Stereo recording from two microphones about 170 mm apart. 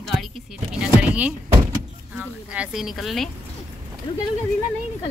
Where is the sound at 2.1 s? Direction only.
5° right (ahead or behind).